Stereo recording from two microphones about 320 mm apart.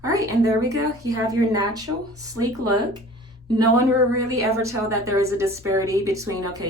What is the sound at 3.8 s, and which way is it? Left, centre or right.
A woman's voice, centre.